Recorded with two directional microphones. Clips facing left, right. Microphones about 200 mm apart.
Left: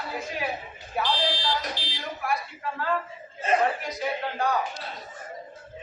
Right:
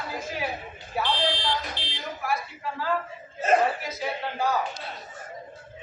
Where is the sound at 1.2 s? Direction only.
55° right (ahead or behind).